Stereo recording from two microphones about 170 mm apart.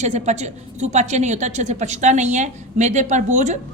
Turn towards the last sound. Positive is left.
turn(degrees=-45)  # may be behind; listen again after turning